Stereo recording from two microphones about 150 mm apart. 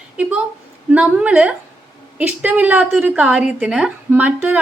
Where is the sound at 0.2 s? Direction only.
10° right (ahead or behind).